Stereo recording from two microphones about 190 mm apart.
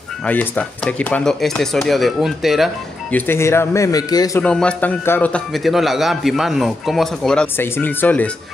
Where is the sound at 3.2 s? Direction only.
15° left (ahead or behind).